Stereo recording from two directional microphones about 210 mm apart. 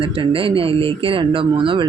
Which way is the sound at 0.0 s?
25° right (ahead or behind).